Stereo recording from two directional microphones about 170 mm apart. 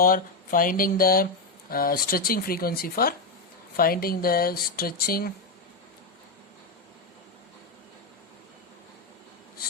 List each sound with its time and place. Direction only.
0.0 s speech: 55° left (ahead or behind)